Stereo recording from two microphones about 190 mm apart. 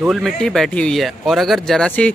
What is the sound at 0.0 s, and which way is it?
Speech, centre (ahead or behind).